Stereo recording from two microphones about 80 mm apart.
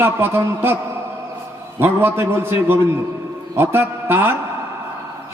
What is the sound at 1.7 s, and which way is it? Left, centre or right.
A man's voice, right.